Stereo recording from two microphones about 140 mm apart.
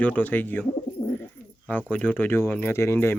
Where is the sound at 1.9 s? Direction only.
10° left (ahead or behind).